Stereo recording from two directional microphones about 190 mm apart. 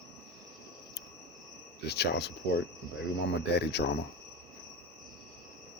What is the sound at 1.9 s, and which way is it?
Speech, 60° left (ahead or behind).